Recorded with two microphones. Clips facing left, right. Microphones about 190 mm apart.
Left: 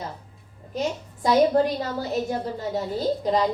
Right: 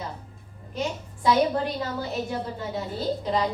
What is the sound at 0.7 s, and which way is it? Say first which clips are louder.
A child's voice: left 3 dB; 40° left (ahead or behind).